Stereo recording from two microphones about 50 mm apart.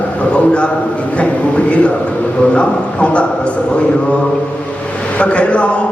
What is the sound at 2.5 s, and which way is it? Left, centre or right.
Speech, left.